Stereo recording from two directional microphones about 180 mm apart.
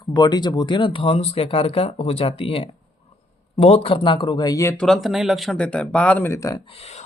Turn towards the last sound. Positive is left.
turn(degrees=35)  # may be behind; listen again after turning